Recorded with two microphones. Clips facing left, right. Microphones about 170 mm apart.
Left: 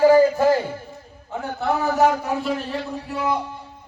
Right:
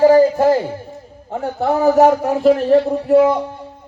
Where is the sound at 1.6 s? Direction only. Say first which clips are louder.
Right 7 dB; 50° right (ahead or behind).